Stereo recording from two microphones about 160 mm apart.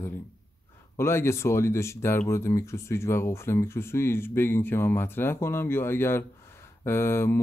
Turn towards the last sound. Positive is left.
turn(degrees=15)  # may be behind; listen again after turning